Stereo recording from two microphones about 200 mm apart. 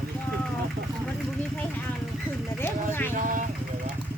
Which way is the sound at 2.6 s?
10° left (ahead or behind).